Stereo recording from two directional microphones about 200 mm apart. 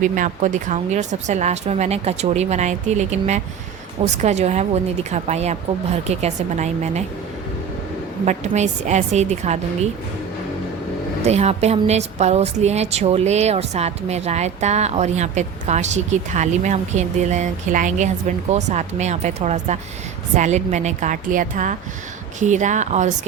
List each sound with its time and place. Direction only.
0.0 s a woman's voice: 40° right (ahead or behind)
8.2 s a woman's voice: 35° right (ahead or behind)
11.3 s a woman's voice: 35° right (ahead or behind)